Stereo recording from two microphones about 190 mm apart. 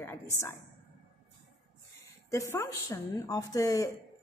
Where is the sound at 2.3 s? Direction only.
15° left (ahead or behind).